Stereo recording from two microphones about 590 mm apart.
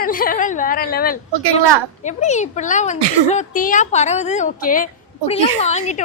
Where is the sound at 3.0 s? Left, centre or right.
Right.